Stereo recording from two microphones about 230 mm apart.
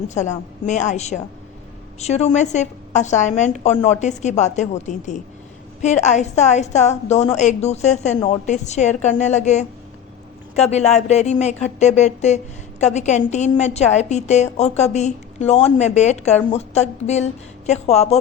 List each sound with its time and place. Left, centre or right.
0.1 s a woman's voice: left